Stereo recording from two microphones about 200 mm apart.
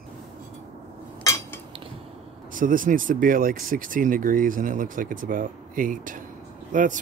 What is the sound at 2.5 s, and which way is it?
Speech, 40° right (ahead or behind).